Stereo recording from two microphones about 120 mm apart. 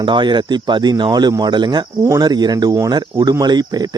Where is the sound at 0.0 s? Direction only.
40° right (ahead or behind).